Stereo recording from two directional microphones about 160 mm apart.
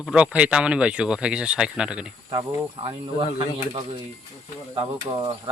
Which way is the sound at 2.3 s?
35° right (ahead or behind).